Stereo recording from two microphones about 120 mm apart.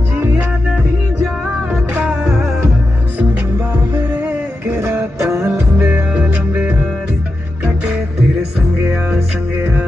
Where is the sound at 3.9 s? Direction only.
15° right (ahead or behind).